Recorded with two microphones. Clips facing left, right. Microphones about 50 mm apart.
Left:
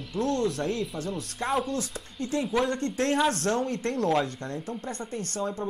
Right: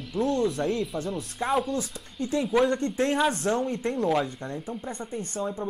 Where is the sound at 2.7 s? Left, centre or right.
Centre.